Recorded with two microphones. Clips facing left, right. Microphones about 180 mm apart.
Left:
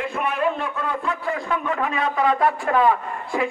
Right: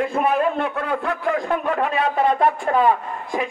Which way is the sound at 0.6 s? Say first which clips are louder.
Right 4 dB; 60° right (ahead or behind).